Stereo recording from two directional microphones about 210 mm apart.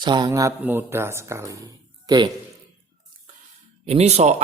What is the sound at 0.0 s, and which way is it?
Speech, 20° right (ahead or behind).